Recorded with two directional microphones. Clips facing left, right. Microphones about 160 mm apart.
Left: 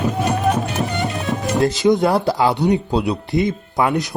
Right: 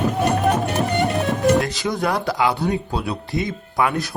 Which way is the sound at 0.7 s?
55° right (ahead or behind).